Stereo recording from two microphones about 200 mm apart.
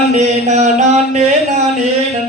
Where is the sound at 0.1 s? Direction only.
35° right (ahead or behind).